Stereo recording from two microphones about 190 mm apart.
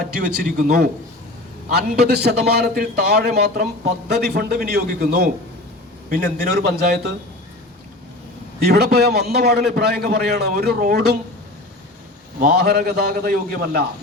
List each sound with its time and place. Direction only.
0.2 s a man's voice: 55° right (ahead or behind)
8.6 s a man's voice: 55° right (ahead or behind)
12.4 s a man's voice: 55° right (ahead or behind)